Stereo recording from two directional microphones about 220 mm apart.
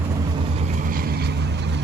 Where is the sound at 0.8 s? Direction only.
40° right (ahead or behind).